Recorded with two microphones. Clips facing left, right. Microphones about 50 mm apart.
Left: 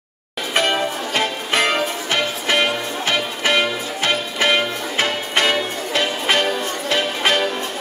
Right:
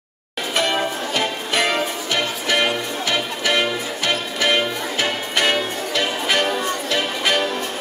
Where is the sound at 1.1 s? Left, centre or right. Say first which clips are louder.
Left 2 dB; left.